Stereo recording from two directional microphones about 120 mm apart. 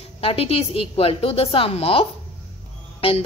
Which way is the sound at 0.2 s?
50° left (ahead or behind).